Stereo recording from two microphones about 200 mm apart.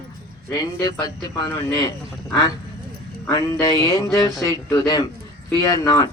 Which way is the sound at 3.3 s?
15° left (ahead or behind).